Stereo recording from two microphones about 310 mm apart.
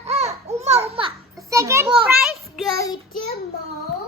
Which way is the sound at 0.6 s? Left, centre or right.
Centre.